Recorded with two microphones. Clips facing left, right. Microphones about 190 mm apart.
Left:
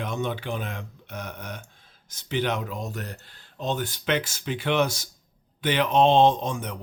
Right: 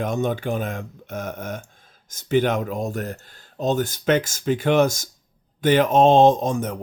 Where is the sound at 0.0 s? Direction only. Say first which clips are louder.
Right 6 dB; 45° right (ahead or behind).